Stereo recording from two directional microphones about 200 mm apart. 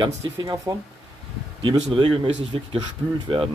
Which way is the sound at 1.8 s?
30° right (ahead or behind).